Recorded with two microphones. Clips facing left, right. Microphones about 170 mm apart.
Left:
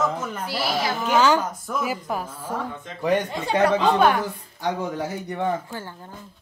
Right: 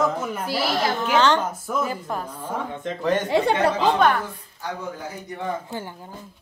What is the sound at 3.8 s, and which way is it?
Speech, 5° left (ahead or behind).